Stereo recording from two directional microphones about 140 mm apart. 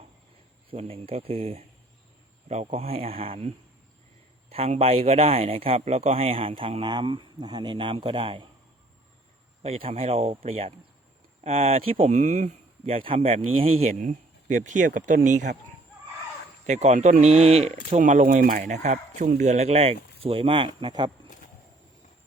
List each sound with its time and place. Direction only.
0.7 s a man's voice: 45° right (ahead or behind)
9.6 s a man's voice: 45° right (ahead or behind)
14.0 s speech: 65° right (ahead or behind)
16.6 s speech: 55° right (ahead or behind); by 18.6 s 75° right (ahead or behind)
18.7 s speech: 55° right (ahead or behind); by 21.1 s 30° right (ahead or behind)